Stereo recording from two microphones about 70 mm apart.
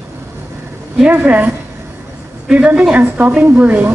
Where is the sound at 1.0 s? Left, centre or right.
Right.